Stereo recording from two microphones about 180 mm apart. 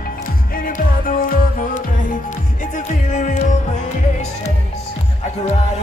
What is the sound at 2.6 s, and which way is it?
Music, 45° left (ahead or behind).